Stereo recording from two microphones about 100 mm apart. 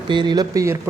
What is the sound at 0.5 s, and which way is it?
Speech, 30° right (ahead or behind).